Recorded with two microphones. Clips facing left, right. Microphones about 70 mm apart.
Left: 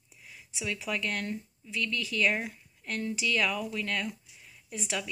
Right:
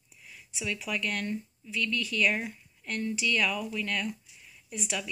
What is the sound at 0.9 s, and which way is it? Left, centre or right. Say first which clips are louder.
Speech: right 1 dB; left.